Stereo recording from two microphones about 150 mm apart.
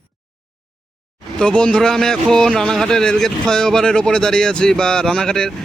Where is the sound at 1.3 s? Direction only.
5° left (ahead or behind).